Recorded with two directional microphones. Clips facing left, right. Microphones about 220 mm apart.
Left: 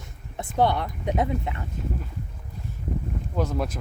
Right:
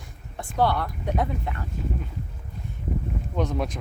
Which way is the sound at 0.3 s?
20° left (ahead or behind).